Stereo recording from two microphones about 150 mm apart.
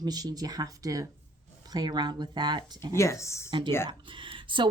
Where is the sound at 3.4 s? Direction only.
30° right (ahead or behind).